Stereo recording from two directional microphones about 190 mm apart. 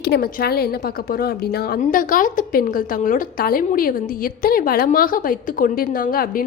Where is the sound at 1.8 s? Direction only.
45° left (ahead or behind).